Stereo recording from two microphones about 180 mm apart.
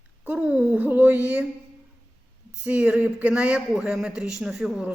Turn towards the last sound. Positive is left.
turn(degrees=-5)  # may be behind; listen again after turning